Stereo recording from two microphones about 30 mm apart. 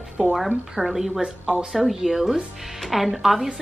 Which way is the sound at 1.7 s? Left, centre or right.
Centre.